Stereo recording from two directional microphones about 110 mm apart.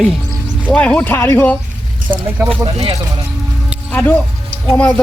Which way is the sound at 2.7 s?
50° right (ahead or behind).